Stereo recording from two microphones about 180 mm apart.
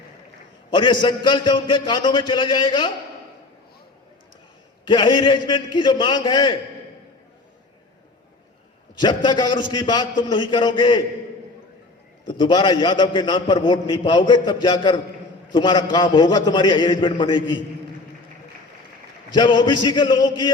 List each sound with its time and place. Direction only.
0.7 s a man's voice: 25° left (ahead or behind)
4.9 s a man's voice: 25° left (ahead or behind)
9.0 s a man's voice: 25° left (ahead or behind)
12.2 s a man's voice: 25° left (ahead or behind)
19.3 s a man's voice: 25° left (ahead or behind)